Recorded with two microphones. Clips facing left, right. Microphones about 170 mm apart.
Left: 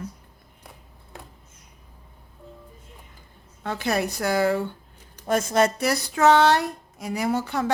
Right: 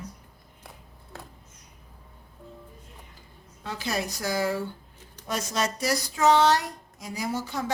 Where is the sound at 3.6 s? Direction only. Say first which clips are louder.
Left 6 dB; 60° left (ahead or behind).